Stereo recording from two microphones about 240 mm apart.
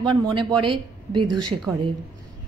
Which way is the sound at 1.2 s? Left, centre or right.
Right.